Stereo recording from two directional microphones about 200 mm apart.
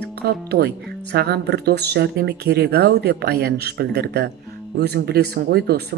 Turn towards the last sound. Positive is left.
turn(degrees=-55)  # may be behind; listen again after turning